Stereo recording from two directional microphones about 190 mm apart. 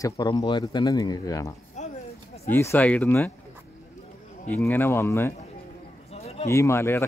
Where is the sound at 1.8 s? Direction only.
35° left (ahead or behind).